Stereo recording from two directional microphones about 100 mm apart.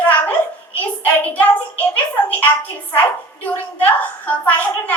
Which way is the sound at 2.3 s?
15° left (ahead or behind).